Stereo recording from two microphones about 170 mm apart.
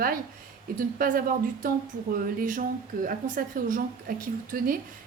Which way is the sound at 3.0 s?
55° right (ahead or behind).